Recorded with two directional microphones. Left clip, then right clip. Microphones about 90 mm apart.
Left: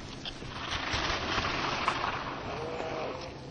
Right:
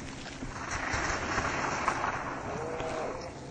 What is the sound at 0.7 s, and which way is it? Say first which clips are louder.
Rain on surface: even; 10° right (ahead or behind).